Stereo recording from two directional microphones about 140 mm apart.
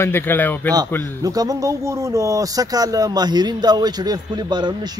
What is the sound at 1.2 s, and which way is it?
Speech, 25° right (ahead or behind).